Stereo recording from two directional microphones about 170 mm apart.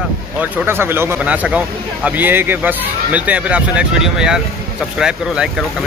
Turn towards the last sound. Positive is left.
turn(degrees=-5)  # may be behind; listen again after turning